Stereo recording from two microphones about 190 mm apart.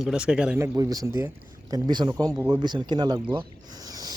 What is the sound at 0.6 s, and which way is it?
Speech, 15° right (ahead or behind).